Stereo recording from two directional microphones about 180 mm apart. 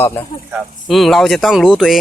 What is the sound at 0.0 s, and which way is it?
Speech, 10° left (ahead or behind).